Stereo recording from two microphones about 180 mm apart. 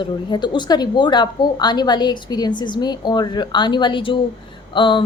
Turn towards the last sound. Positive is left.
turn(degrees=25)  # may be behind; listen again after turning